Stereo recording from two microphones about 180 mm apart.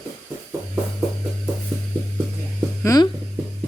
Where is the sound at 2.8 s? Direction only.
20° left (ahead or behind).